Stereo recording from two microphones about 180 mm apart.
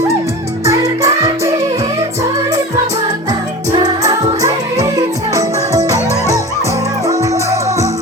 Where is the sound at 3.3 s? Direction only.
20° right (ahead or behind).